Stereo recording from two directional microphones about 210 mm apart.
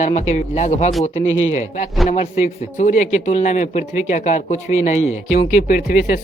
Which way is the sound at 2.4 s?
35° left (ahead or behind).